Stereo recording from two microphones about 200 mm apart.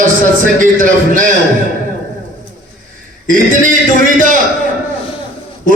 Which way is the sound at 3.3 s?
40° right (ahead or behind).